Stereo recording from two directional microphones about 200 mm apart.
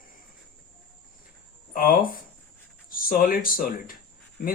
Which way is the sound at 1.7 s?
45° left (ahead or behind).